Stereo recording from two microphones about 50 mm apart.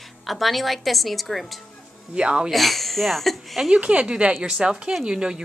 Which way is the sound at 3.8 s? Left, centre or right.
Right.